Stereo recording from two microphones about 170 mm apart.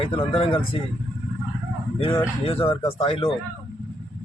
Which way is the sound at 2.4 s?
35° left (ahead or behind).